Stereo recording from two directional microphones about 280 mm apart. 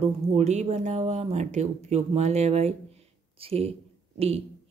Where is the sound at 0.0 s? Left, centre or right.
Right.